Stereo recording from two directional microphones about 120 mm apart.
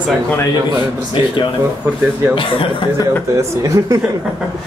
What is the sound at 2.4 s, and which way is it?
Speech, 45° left (ahead or behind).